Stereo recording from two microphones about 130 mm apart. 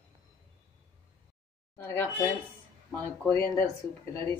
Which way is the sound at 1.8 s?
20° left (ahead or behind).